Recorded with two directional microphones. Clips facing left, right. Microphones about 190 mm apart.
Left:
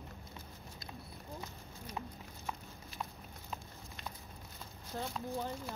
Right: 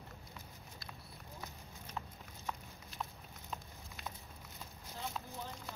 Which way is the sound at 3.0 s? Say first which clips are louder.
Left 1 dB; centre (ahead or behind).